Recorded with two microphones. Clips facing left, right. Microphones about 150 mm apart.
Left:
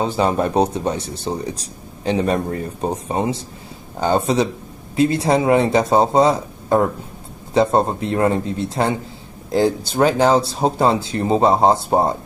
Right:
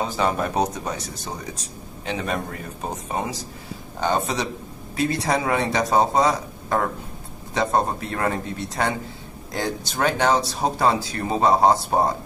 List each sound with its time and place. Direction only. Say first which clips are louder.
0.0 s speech: left 5 dB; 30° left (ahead or behind)